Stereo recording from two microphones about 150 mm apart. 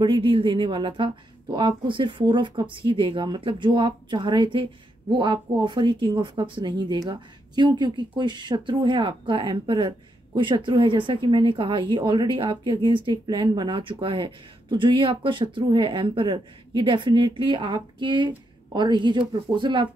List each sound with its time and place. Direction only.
0.0 s speech: 30° right (ahead or behind)